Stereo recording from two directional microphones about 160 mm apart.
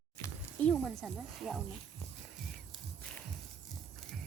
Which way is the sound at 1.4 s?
Centre (ahead or behind).